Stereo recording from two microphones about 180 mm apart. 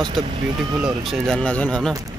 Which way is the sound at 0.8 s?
Centre (ahead or behind).